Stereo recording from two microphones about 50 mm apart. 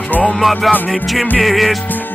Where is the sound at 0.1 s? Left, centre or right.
Left.